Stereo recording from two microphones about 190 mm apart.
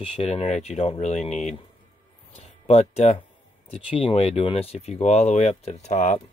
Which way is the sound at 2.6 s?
35° left (ahead or behind).